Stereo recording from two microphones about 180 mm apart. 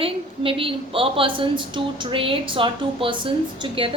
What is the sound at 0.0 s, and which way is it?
A woman's voice, 30° right (ahead or behind).